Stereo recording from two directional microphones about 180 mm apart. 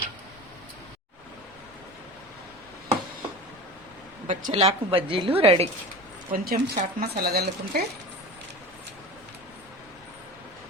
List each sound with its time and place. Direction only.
4.3 s a woman's voice: 40° right (ahead or behind)
6.3 s speech: 55° right (ahead or behind)